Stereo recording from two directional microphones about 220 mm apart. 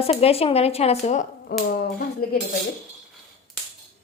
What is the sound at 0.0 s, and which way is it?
Speech, 25° left (ahead or behind).